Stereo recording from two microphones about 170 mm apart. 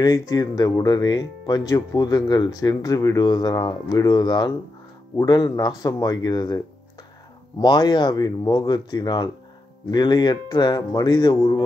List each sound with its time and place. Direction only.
0.0 s speech: 20° left (ahead or behind)
7.6 s speech: 25° left (ahead or behind)